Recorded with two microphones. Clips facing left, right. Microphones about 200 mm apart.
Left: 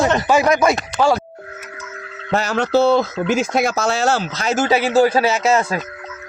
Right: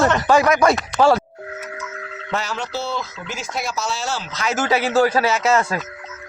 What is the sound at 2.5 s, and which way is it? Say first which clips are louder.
Speech: left 12 dB; 60° left (ahead or behind).